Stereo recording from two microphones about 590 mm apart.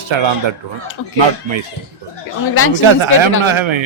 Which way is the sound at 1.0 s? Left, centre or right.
Left.